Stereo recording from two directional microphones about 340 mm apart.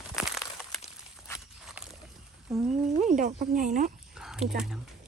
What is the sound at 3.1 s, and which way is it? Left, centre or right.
Speech, right.